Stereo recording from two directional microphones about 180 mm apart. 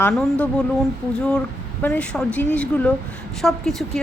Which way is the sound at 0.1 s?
5° left (ahead or behind).